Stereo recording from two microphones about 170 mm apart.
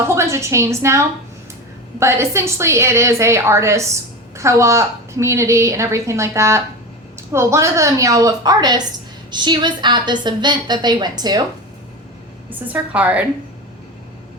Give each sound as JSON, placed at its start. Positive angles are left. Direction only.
{"t": 0.1, "sound": "a woman's voice", "side_deg": -15}
{"t": 12.5, "sound": "a woman's voice", "side_deg": -10}